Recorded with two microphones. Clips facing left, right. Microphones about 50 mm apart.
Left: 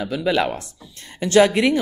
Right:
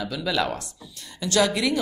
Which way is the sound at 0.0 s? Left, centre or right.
Left.